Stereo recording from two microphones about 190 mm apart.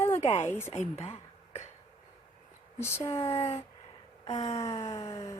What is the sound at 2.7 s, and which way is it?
Speech, 15° left (ahead or behind).